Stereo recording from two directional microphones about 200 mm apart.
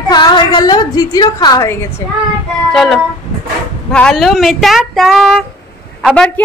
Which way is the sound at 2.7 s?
Centre (ahead or behind).